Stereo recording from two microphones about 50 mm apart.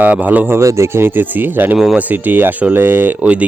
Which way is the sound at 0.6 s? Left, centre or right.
Right.